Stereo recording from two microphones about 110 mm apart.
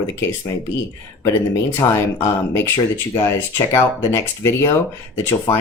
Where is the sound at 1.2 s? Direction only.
25° left (ahead or behind).